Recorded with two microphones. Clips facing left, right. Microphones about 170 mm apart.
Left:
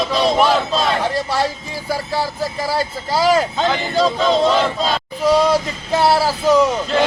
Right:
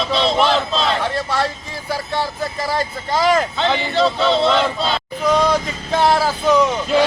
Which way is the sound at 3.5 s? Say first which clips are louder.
Left 1 dB; 40° left (ahead or behind).